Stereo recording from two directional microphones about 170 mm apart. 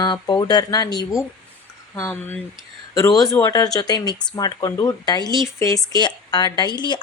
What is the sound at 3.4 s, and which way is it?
Speech, 20° left (ahead or behind).